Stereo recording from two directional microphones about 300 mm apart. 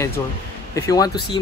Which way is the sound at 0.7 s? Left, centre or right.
Centre.